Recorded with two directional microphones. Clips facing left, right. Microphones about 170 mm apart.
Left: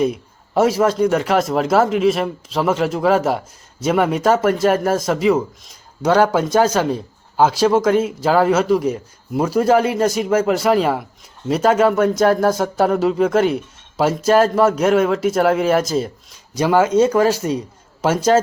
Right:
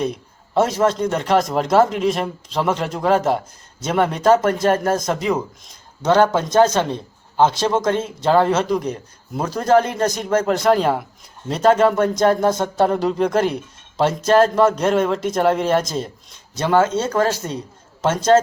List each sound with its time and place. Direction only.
0.0 s speech: 10° left (ahead or behind)